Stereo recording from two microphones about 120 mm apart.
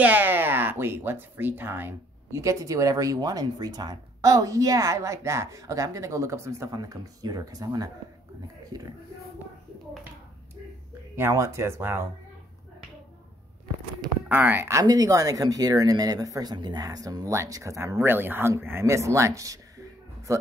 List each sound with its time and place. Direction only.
0.0 s a sound: 15° right (ahead or behind)
1.3 s speech: 15° right (ahead or behind); by 7.9 s 30° right (ahead or behind)
11.1 s speech: 20° right (ahead or behind)
14.3 s speech: 15° right (ahead or behind)
14.8 s speech: 30° right (ahead or behind)